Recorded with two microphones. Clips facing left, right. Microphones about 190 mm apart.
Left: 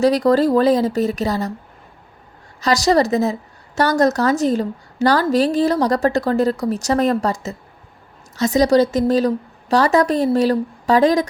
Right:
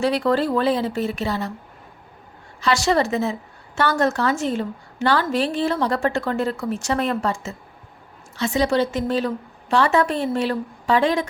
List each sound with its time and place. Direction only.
0.0 s a woman's voice: 40° left (ahead or behind)
2.6 s a woman's voice: 40° left (ahead or behind)